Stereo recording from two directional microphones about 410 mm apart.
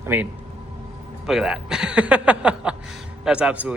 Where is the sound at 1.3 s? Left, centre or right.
Centre.